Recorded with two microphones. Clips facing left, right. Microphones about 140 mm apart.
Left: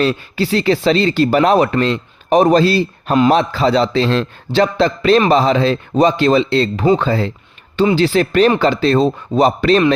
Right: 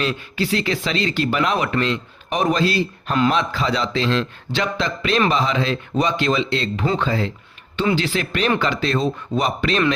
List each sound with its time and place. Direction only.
0.0 s speech: 35° left (ahead or behind)